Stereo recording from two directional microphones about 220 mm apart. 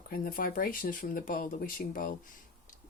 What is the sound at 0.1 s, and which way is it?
Speech, 40° left (ahead or behind).